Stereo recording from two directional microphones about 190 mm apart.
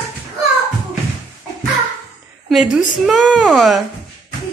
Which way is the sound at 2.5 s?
Centre (ahead or behind).